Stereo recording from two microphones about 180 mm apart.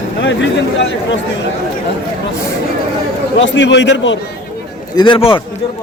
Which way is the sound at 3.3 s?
85° left.